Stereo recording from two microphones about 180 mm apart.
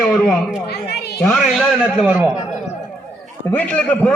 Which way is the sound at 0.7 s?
60° left (ahead or behind).